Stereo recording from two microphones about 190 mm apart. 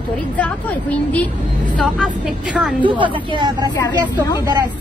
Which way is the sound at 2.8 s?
25° right (ahead or behind).